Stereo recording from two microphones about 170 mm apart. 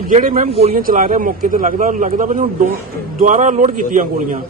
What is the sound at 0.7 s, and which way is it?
A man's voice, 55° right (ahead or behind).